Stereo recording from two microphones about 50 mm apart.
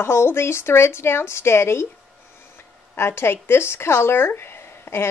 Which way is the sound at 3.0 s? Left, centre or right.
Left.